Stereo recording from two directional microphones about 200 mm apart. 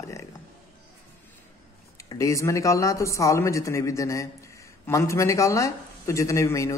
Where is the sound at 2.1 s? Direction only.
15° left (ahead or behind).